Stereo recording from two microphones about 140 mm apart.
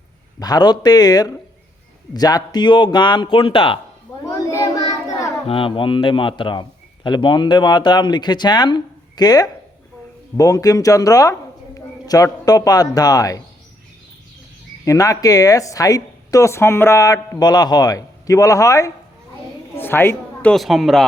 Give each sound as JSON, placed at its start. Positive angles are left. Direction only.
{"t": 0.3, "sound": "a man's voice", "side_deg": 30}
{"t": 4.3, "sound": "child singing", "side_deg": 25}
{"t": 5.5, "sound": "a man's voice", "side_deg": 40}
{"t": 14.8, "sound": "speech", "side_deg": 25}
{"t": 19.7, "sound": "a sound", "side_deg": 15}
{"t": 20.5, "sound": "speech", "side_deg": 0}